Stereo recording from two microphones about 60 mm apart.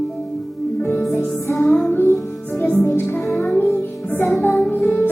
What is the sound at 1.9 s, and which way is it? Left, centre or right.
Music, left.